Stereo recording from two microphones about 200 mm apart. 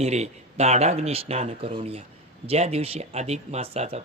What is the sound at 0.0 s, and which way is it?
Speech, 35° right (ahead or behind).